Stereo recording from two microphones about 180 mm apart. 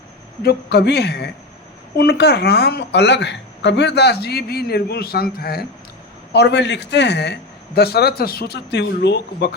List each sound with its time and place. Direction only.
0.4 s a woman's voice: 65° left (ahead or behind)
6.3 s a man's voice: 70° left (ahead or behind)